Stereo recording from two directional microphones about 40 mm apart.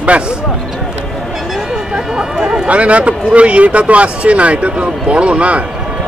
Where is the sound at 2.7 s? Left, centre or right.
Right.